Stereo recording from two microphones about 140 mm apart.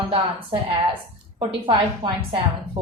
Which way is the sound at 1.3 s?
35° right (ahead or behind).